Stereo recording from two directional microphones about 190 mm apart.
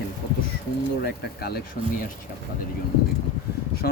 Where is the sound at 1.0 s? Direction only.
55° left (ahead or behind).